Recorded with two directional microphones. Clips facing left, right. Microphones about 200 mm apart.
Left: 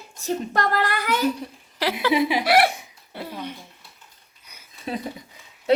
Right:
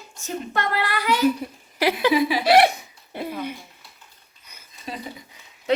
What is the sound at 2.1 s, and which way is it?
Speech, 20° left (ahead or behind).